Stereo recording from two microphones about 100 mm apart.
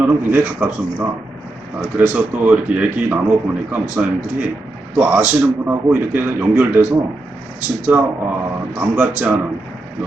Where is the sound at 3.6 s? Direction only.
15° right (ahead or behind).